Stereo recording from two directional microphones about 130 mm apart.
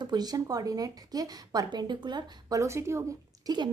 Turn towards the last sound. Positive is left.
turn(degrees=-25)  # may be behind; listen again after turning